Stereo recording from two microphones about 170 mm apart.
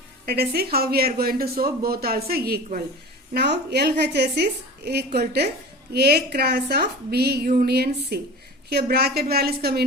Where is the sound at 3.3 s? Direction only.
75° right (ahead or behind).